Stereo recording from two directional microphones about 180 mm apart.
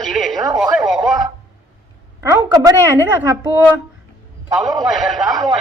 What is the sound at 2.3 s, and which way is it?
Speech, 20° right (ahead or behind).